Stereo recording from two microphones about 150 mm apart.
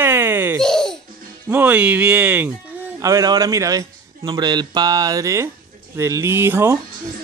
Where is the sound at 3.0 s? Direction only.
25° right (ahead or behind).